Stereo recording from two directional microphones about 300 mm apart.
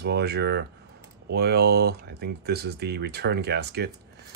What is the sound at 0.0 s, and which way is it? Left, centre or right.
Speech, right.